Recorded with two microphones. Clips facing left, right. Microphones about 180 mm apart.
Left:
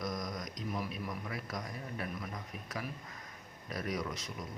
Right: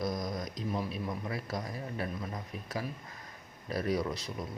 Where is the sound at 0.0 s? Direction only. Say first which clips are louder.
Right 4 dB; 30° right (ahead or behind).